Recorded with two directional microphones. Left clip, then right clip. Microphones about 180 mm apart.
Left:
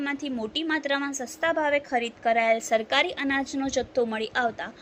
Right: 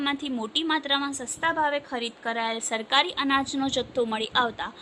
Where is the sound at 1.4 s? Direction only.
10° left (ahead or behind).